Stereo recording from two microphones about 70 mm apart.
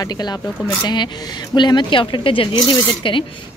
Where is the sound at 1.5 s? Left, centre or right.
Left.